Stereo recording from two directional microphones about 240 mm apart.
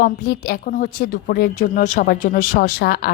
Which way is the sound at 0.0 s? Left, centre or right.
Left.